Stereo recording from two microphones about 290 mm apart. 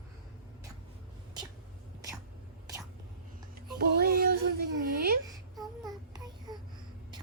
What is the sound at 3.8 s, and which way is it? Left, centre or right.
Music, right.